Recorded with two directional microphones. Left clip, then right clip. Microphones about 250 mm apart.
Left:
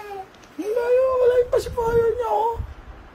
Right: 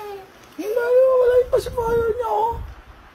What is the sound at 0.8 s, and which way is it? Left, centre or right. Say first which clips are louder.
Whimper: right 3 dB; centre.